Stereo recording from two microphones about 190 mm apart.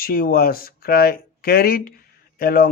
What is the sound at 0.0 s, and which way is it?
Speech, 50° left (ahead or behind).